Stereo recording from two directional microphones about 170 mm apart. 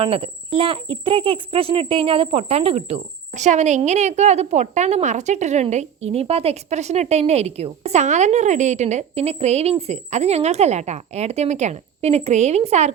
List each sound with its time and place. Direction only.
0.0 s speech: 30° right (ahead or behind)